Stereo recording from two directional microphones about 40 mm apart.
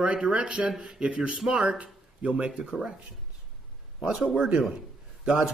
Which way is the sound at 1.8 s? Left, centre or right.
Right.